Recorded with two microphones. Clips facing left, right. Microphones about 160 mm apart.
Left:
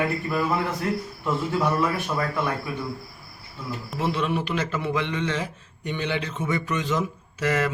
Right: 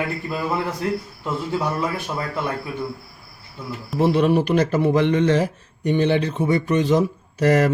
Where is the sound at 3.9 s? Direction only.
40° right (ahead or behind).